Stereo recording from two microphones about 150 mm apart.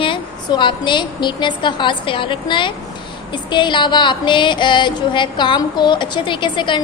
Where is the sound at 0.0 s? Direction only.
35° left (ahead or behind).